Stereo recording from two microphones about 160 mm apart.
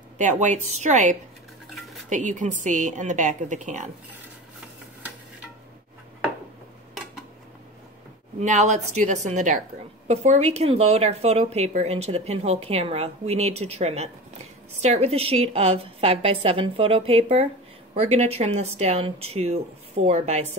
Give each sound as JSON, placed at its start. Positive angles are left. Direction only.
{"t": 0.2, "sound": "a woman's voice", "side_deg": -50}
{"t": 8.4, "sound": "a woman's voice", "side_deg": -45}